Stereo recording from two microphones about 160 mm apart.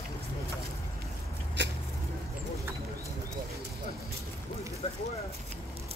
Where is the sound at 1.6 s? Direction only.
90° right.